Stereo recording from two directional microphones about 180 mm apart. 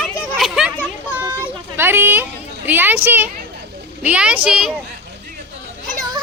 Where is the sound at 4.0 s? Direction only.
5° right (ahead or behind).